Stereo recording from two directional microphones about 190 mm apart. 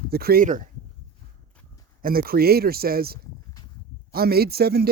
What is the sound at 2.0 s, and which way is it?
Speech, 50° right (ahead or behind).